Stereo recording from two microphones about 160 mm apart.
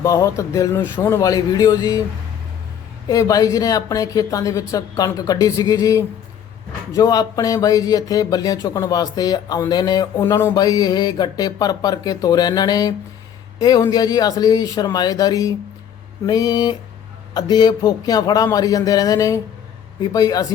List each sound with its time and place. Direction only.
0.0 s speech: 20° left (ahead or behind)
3.1 s speech: 20° left (ahead or behind)